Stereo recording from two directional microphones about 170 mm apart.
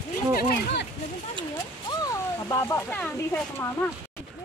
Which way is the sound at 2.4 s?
15° left (ahead or behind).